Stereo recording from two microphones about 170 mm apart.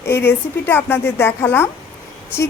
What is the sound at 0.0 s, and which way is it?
Speech, 15° left (ahead or behind).